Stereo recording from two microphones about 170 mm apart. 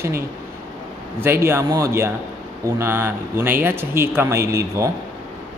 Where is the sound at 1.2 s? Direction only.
15° right (ahead or behind).